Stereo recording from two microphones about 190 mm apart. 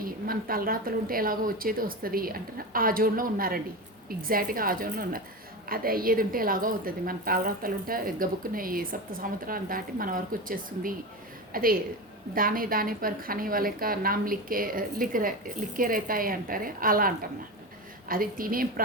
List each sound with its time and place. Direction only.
0.0 s a woman's voice: 50° right (ahead or behind)